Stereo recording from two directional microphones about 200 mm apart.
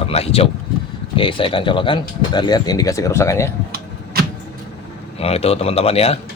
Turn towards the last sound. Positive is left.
turn(degrees=30)  # may be behind; listen again after turning